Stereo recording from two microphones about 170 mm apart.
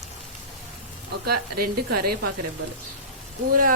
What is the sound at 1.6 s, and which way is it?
Speech, 65° right (ahead or behind).